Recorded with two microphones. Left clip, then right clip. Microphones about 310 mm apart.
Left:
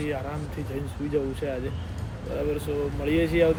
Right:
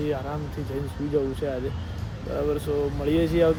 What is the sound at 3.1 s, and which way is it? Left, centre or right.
Speech, centre.